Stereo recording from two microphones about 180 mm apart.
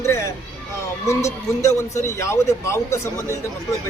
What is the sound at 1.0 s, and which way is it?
A man's voice, 15° left (ahead or behind).